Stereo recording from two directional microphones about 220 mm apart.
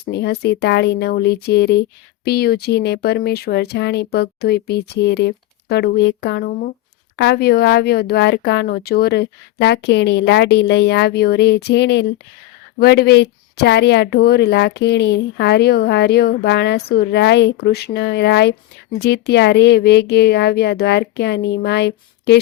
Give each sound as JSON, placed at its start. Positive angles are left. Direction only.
{"t": 0.0, "sound": "speech", "side_deg": 50}